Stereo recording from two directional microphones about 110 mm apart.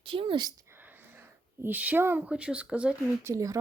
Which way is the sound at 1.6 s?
15° right (ahead or behind).